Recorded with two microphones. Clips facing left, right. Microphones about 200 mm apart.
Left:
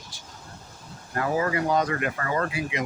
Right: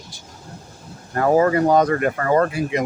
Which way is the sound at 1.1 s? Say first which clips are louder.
Right 9 dB; 45° right (ahead or behind).